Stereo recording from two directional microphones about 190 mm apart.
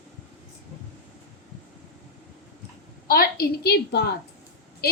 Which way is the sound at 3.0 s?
50° left (ahead or behind).